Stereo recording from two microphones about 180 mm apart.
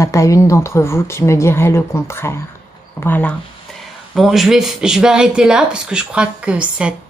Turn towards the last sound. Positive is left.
turn(degrees=-5)  # may be behind; listen again after turning